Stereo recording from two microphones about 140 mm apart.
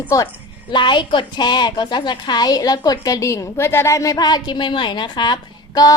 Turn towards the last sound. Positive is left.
turn(degrees=30)  # may be behind; listen again after turning